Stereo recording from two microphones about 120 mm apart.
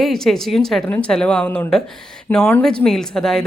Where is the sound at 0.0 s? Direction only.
5° left (ahead or behind).